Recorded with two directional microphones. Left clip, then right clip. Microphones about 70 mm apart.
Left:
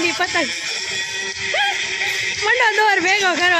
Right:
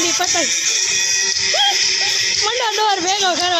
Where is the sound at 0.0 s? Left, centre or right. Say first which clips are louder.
Right 1 dB; left.